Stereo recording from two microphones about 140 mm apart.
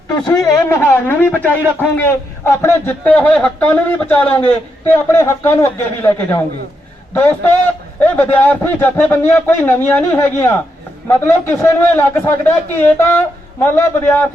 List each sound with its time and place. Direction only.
0.3 s a man's voice: 25° left (ahead or behind)